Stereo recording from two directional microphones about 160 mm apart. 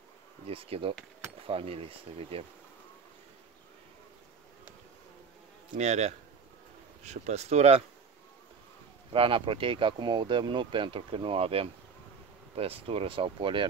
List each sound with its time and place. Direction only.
0.5 s speech: 35° right (ahead or behind)
5.8 s speech: 45° right (ahead or behind)
9.1 s speech: 35° right (ahead or behind)